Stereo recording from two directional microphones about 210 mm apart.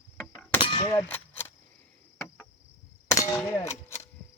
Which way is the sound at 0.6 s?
25° left (ahead or behind).